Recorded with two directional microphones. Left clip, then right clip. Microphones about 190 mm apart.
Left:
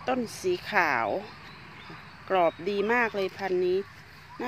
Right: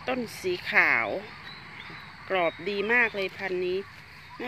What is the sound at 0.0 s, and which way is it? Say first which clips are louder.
Speech: left 1 dB; 15° left (ahead or behind).